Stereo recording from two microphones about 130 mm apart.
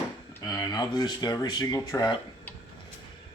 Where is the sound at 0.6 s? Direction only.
30° left (ahead or behind).